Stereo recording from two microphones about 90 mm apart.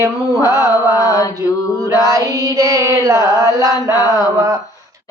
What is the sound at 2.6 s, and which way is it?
Female singing, 40° right (ahead or behind).